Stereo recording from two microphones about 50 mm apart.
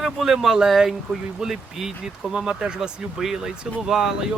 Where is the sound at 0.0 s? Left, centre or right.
Centre.